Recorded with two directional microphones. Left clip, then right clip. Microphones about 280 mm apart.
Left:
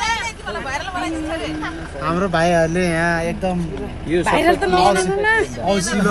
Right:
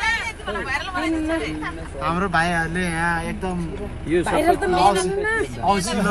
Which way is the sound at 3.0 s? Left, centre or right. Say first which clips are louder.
Left 4 dB; right.